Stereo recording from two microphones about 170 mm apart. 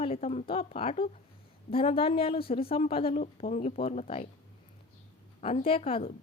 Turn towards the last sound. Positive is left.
turn(degrees=35)  # may be behind; listen again after turning